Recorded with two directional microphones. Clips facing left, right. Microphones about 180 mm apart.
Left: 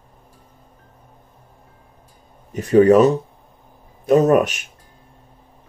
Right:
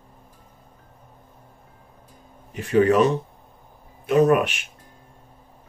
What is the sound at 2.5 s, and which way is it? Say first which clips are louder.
Speech: left 6 dB; 40° left (ahead or behind).